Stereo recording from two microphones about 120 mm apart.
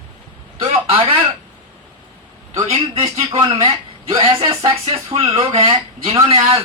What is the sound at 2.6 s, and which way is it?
Speech, 60° right (ahead or behind).